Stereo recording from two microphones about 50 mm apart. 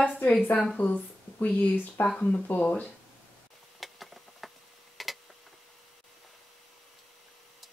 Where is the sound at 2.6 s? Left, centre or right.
Left.